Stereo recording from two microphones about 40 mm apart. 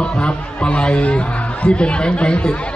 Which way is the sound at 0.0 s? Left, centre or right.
Left.